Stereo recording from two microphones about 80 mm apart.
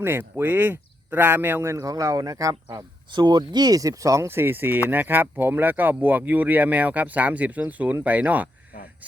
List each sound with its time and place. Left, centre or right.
0.0 s speech: right
2.7 s speech: right; by 8.4 s centre